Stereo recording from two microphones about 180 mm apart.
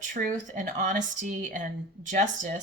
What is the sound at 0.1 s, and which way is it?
A woman's voice, 45° right (ahead or behind).